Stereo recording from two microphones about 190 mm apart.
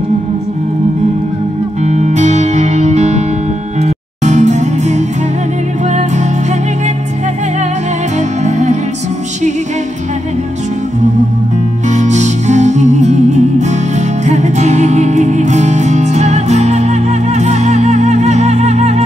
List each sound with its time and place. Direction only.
1.9 s music: 35° right (ahead or behind)
8.5 s music: 40° right (ahead or behind)
11.9 s music: 40° right (ahead or behind)